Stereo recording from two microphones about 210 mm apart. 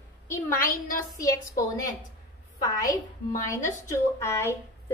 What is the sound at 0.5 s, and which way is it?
A woman's voice, 40° left (ahead or behind).